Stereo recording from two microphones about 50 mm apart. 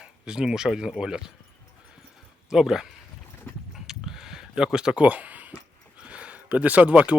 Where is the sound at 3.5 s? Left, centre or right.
Left.